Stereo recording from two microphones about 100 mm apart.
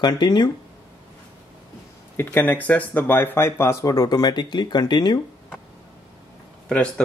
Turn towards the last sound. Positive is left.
turn(degrees=10)  # may be behind; listen again after turning